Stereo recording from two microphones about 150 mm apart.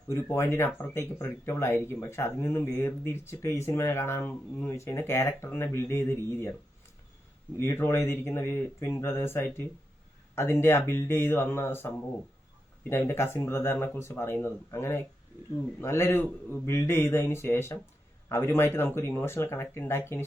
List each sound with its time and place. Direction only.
0.1 s speech: 20° left (ahead or behind)
7.6 s speech: 15° left (ahead or behind)